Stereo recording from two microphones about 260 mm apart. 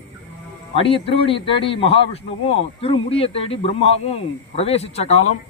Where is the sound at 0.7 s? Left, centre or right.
Left.